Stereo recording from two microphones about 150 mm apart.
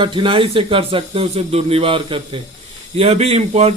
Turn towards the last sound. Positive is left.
turn(degrees=-45)  # may be behind; listen again after turning